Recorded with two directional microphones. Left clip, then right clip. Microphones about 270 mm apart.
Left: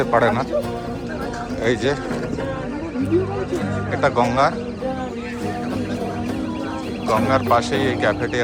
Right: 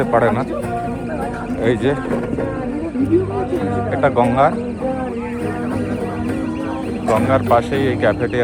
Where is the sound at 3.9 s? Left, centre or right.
Centre.